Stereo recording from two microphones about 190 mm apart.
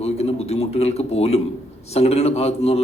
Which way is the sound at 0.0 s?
35° left (ahead or behind).